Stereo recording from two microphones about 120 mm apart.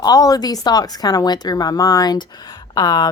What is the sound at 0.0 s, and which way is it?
A woman's voice, 30° left (ahead or behind).